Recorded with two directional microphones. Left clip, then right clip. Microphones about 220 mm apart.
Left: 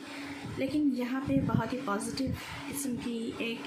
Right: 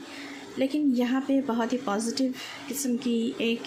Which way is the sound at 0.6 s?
45° right (ahead or behind).